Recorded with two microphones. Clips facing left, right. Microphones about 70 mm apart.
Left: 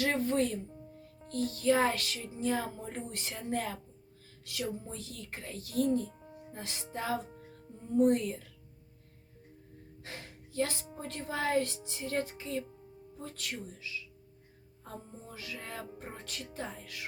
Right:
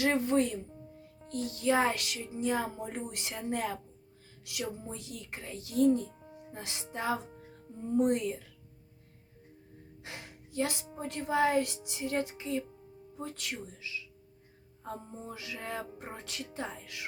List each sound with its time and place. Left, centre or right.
0.0 s speech: right
4.9 s speech: right
6.3 s music: centre
6.9 s speech: right
10.0 s gasp: centre
10.9 s speech: centre
15.4 s speech: right